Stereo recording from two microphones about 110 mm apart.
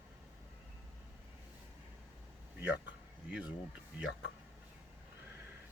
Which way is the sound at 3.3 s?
10° right (ahead or behind).